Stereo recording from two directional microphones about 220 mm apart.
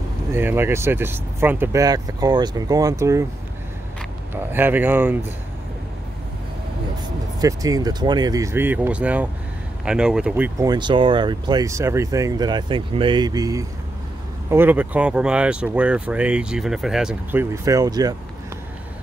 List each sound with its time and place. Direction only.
0.3 s speech: 10° right (ahead or behind)
4.3 s speech: 10° right (ahead or behind)
7.3 s speech: 15° right (ahead or behind)